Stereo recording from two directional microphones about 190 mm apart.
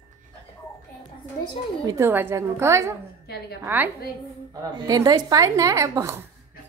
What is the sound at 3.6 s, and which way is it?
A woman's voice, 10° right (ahead or behind).